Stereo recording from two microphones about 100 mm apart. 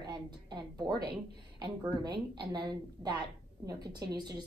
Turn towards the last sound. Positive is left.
turn(degrees=-45)  # may be behind; listen again after turning